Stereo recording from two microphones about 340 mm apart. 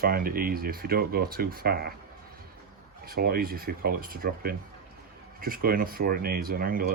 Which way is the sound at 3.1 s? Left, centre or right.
Right.